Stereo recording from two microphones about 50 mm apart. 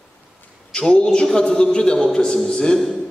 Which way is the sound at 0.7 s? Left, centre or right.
Centre.